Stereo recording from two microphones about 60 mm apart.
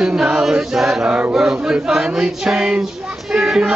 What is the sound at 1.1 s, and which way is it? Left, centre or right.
Chant, right.